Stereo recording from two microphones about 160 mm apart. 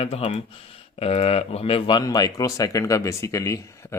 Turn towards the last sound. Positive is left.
turn(degrees=15)  # may be behind; listen again after turning